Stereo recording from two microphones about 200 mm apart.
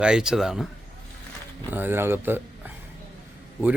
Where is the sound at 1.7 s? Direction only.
10° right (ahead or behind).